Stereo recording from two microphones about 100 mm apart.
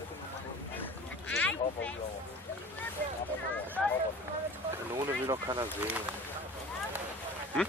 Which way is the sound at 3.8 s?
Centre (ahead or behind).